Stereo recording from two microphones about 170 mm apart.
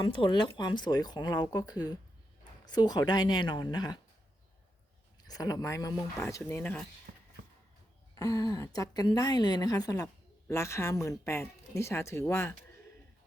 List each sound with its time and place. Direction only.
0.0 s a woman's voice: 30° left (ahead or behind)
5.3 s a woman's voice: 20° left (ahead or behind)
8.1 s a woman's voice: 20° left (ahead or behind)